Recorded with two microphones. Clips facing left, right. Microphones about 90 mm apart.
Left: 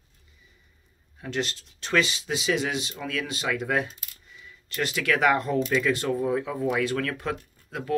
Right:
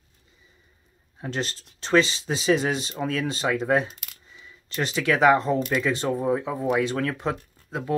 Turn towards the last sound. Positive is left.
turn(degrees=-25)  # may be behind; listen again after turning